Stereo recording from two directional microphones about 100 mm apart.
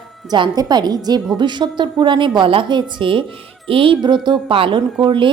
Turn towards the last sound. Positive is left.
turn(degrees=-55)  # may be behind; listen again after turning